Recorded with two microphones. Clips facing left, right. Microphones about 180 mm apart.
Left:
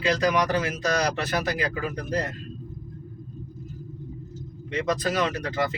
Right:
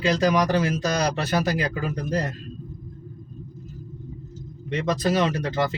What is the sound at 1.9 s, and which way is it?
Speech, 30° right (ahead or behind).